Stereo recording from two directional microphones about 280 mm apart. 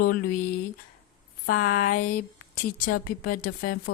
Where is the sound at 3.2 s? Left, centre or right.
Left.